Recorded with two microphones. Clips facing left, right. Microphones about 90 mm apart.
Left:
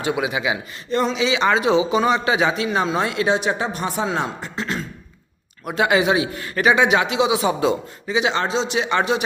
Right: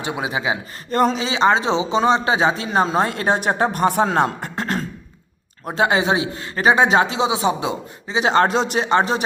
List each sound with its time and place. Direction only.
0.0 s a man's voice: 30° right (ahead or behind)
0.9 s a man's voice: 45° right (ahead or behind)
5.6 s a man's voice: 30° right (ahead or behind)
8.1 s a man's voice: 40° right (ahead or behind)